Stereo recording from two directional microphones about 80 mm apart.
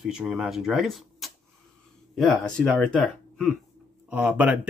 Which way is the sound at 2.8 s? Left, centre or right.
Centre.